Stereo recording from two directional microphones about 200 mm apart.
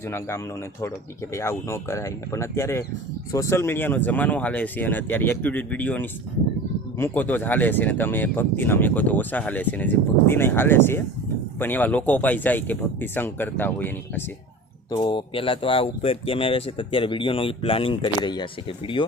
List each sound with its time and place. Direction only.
0.1 s speech: 15° left (ahead or behind)
14.8 s speech: 20° left (ahead or behind)